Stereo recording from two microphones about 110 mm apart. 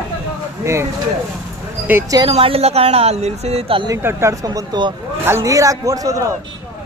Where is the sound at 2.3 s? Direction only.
60° right (ahead or behind).